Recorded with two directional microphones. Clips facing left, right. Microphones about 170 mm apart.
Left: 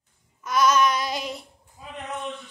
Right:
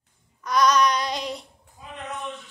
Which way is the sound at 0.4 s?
5° left (ahead or behind).